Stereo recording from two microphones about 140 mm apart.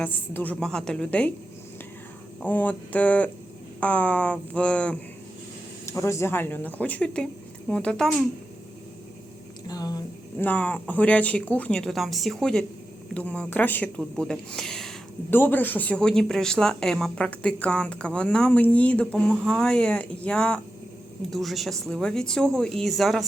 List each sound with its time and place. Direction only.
0.0 s speech: 10° left (ahead or behind)
2.4 s speech: 10° left (ahead or behind)
5.9 s speech: 20° left (ahead or behind)
9.6 s a sound: 30° left (ahead or behind)
10.3 s speech: 10° left (ahead or behind)
15.3 s speech: 15° left (ahead or behind)